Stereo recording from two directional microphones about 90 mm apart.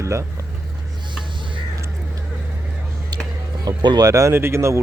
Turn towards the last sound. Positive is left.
turn(degrees=-30)  # may be behind; listen again after turning